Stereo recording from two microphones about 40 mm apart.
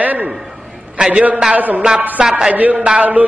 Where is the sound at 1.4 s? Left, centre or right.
Right.